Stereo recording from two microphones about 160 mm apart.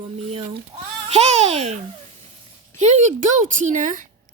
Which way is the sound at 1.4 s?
40° right (ahead or behind).